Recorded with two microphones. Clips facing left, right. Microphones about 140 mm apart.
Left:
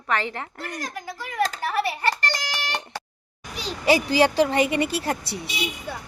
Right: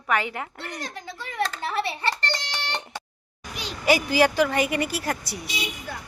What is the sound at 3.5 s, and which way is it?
Speech, 30° left (ahead or behind).